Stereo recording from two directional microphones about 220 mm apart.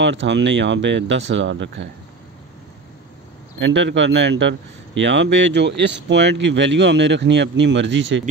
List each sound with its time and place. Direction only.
0.0 s a man's voice: 55° right (ahead or behind)
3.5 s a man's voice: 55° right (ahead or behind)